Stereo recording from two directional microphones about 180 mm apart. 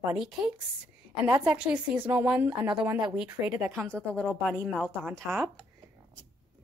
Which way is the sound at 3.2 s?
20° right (ahead or behind).